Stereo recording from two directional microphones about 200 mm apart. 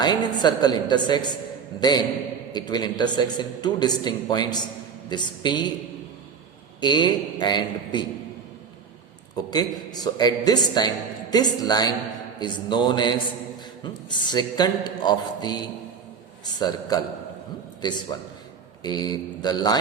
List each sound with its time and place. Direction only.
0.0 s speech: 20° left (ahead or behind)
2.5 s speech: 20° left (ahead or behind)
6.8 s speech: 20° left (ahead or behind)
9.5 s speech: 20° left (ahead or behind)
18.1 s speech: 20° left (ahead or behind)